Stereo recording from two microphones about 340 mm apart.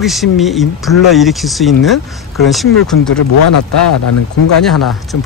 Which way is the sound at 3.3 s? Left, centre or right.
Left.